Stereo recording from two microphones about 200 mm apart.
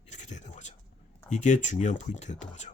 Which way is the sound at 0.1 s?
35° left (ahead or behind).